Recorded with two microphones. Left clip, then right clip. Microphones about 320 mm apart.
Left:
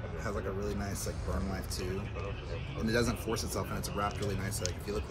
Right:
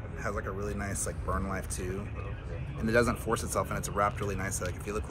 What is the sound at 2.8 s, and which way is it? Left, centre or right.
Speech, centre.